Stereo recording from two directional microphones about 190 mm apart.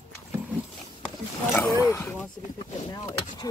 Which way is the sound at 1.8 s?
15° left (ahead or behind).